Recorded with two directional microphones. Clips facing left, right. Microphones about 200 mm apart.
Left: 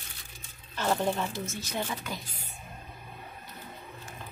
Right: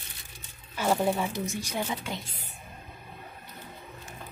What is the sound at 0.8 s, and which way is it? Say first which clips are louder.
Speech: right 2 dB; 10° right (ahead or behind).